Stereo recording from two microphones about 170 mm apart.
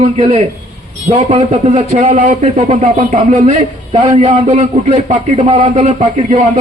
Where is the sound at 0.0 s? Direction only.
40° right (ahead or behind).